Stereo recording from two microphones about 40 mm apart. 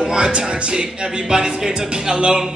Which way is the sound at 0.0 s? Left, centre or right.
Centre.